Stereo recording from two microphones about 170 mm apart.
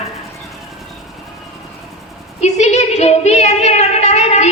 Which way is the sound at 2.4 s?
40° left (ahead or behind).